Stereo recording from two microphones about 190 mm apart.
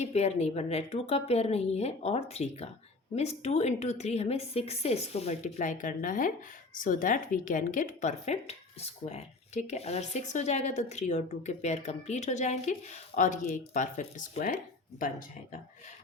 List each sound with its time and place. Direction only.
0.0 s a woman's voice: 35° left (ahead or behind)